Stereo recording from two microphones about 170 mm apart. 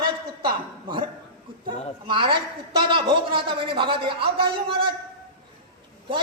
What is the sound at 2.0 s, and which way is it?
A man's voice, 30° right (ahead or behind).